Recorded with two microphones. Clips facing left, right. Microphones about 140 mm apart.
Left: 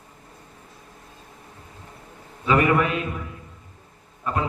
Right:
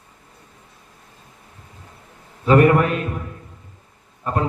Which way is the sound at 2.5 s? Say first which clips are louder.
Right 5 dB; 45° right (ahead or behind).